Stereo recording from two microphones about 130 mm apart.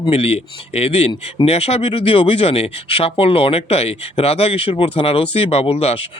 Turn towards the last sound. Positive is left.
turn(degrees=50)  # may be behind; listen again after turning